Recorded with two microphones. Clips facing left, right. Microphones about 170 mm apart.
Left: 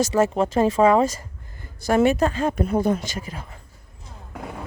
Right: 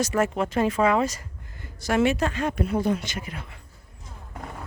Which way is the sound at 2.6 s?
45° left (ahead or behind).